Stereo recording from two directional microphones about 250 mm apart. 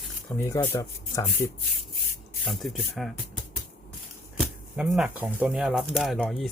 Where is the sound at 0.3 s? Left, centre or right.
Centre.